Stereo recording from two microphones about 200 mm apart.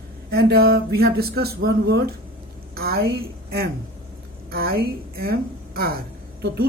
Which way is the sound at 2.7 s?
50° right (ahead or behind).